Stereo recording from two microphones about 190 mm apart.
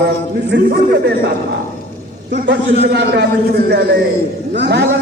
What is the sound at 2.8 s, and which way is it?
A man's voice, 60° right (ahead or behind).